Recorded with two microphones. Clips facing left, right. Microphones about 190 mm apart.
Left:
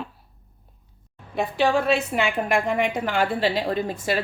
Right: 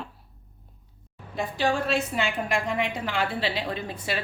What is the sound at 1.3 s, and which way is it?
A woman's voice, 60° left (ahead or behind).